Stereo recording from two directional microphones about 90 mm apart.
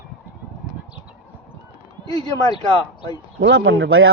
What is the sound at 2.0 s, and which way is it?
Speech, 50° left (ahead or behind).